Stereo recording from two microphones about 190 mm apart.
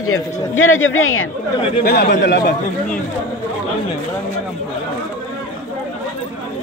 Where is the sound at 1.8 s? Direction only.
60° left (ahead or behind).